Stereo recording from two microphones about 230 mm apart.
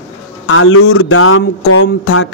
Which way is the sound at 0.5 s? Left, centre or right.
Left.